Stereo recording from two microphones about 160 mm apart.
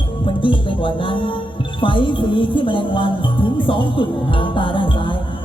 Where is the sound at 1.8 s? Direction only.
30° left (ahead or behind).